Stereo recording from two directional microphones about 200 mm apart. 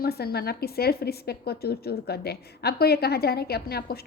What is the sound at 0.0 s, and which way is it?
A woman's voice, 50° left (ahead or behind).